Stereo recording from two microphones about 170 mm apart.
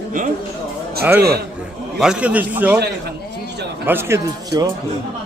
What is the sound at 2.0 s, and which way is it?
Speech, 5° right (ahead or behind).